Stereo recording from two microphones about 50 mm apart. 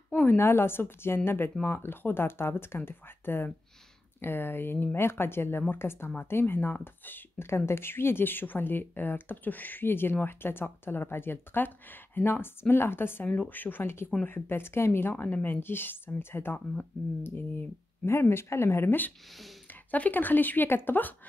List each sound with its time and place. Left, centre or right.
0.4 s speech: left
7.4 s speech: left
13.3 s speech: left
19.7 s speech: left